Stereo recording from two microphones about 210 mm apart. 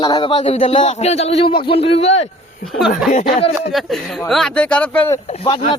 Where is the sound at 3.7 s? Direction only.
Centre (ahead or behind).